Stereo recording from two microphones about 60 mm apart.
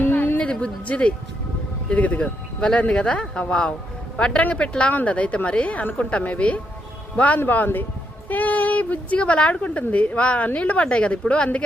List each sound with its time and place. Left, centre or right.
0.0 s music: left
1.9 s a woman's voice: left